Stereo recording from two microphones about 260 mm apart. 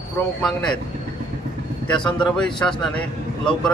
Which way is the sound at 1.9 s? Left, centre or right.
Centre.